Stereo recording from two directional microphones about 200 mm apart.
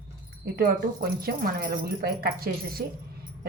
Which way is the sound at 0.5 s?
50° right (ahead or behind).